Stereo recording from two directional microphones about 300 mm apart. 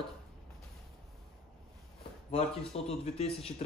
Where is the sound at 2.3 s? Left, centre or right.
Centre.